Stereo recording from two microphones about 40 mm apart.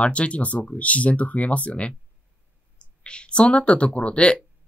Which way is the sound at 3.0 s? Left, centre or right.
Left.